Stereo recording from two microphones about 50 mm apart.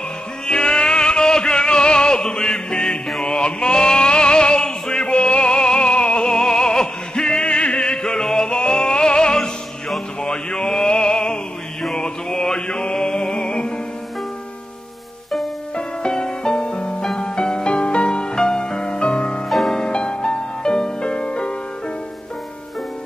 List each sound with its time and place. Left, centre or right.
0.5 s music: centre
10.2 s a sound: centre
11.8 s mantra: centre
15.7 s music: centre
19.5 s music: centre